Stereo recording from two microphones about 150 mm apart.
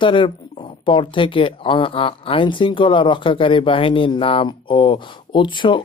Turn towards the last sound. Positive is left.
turn(degrees=30)  # may be behind; listen again after turning